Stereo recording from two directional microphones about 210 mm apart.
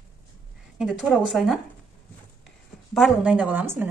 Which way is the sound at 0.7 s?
Centre (ahead or behind).